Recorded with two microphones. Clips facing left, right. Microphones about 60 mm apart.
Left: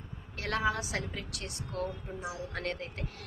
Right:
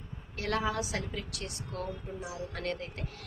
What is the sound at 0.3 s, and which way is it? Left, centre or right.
A woman's voice, left.